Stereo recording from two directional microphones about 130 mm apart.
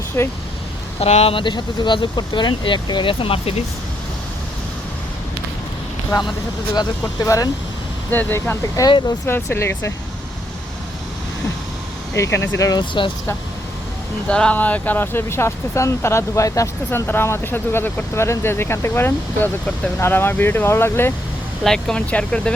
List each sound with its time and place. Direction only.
0.2 s speech: 20° left (ahead or behind)
0.9 s speech: 55° left (ahead or behind)
6.7 s speech: 25° left (ahead or behind)
8.1 s speech: 15° left (ahead or behind)
8.7 s speech: 35° left (ahead or behind)
9.2 s speech: 20° left (ahead or behind)
12.1 s speech: 25° left (ahead or behind)
12.8 s speech: 40° left (ahead or behind)
14.3 s speech: 5° left (ahead or behind)
21.6 s speech: 5° left (ahead or behind)